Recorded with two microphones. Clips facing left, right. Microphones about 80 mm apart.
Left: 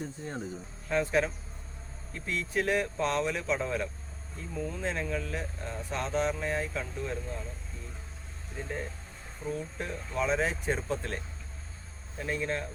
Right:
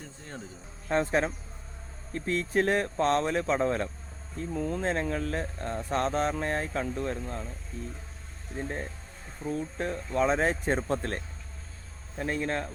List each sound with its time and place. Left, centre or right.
0.9 s speech: right
4.4 s speech: right
8.5 s speech: right
12.2 s speech: right